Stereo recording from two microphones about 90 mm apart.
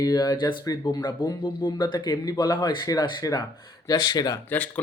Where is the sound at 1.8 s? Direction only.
55° left (ahead or behind).